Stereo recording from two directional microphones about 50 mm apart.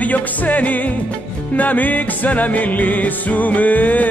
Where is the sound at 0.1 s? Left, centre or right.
Left.